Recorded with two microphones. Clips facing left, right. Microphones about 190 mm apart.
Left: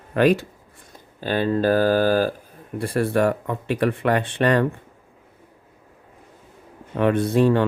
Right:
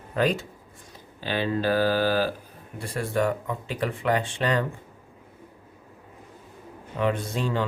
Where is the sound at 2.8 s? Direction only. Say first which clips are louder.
Left 6 dB; 60° left (ahead or behind).